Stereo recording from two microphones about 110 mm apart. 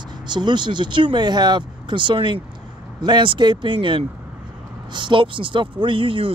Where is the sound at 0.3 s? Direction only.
45° right (ahead or behind).